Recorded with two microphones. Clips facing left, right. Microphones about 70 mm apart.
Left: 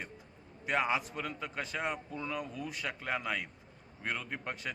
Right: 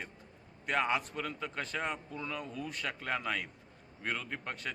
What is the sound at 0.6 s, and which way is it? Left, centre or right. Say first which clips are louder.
A man's voice: even; centre.